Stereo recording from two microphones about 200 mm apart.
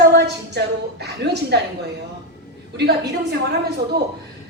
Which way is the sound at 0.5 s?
55° right (ahead or behind).